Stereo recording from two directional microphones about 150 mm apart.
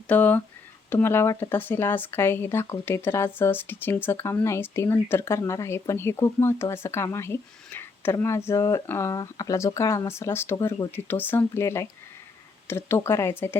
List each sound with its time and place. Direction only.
0.1 s speech: 10° left (ahead or behind)